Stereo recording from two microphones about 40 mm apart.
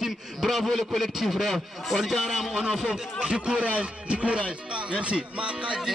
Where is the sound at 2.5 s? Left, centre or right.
Centre.